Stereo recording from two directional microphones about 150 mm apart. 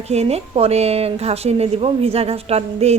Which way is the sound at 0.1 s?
45° right (ahead or behind).